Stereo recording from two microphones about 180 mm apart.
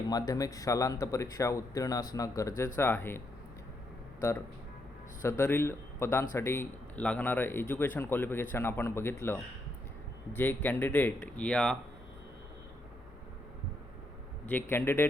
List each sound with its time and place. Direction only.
0.1 s speech: 20° left (ahead or behind)
4.2 s speech: 15° left (ahead or behind)
14.4 s speech: 10° left (ahead or behind)